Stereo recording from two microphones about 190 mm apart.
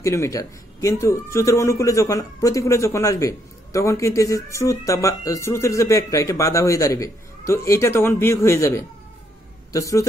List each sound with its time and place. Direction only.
0.0 s a man's voice: 15° left (ahead or behind)